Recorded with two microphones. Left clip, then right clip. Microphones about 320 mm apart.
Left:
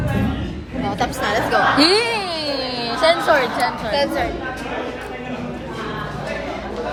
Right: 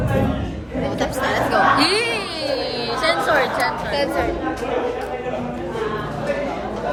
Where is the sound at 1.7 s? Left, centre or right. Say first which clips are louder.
Left 2 dB; centre.